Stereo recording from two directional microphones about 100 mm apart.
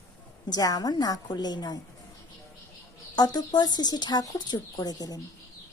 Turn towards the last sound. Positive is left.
turn(degrees=40)  # may be behind; listen again after turning